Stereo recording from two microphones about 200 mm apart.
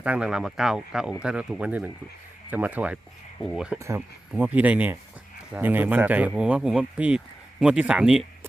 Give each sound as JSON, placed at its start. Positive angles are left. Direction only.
{"t": 0.0, "sound": "speech", "side_deg": -5}
{"t": 3.8, "sound": "speech", "side_deg": -15}